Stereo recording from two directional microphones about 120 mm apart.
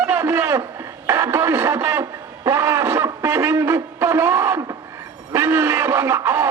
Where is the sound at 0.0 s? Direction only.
20° right (ahead or behind).